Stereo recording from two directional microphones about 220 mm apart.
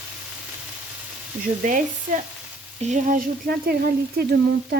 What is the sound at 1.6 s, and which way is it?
Frying, 35° right (ahead or behind).